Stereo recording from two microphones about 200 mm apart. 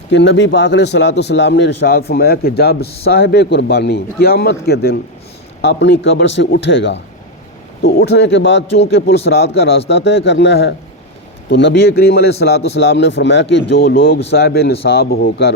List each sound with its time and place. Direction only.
0.1 s a man's voice: 65° left (ahead or behind)
7.8 s a man's voice: 50° left (ahead or behind)